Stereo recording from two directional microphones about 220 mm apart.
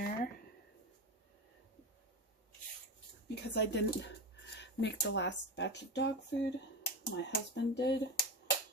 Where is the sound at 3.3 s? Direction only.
50° left (ahead or behind).